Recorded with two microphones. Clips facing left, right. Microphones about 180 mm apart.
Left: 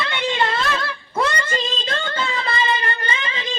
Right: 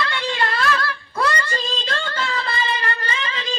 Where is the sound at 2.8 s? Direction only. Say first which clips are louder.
Left 1 dB; 20° left (ahead or behind).